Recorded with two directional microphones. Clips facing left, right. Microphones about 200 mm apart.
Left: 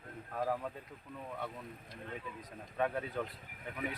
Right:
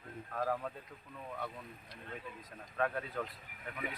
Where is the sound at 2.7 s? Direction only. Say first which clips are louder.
Left 1 dB; 15° left (ahead or behind).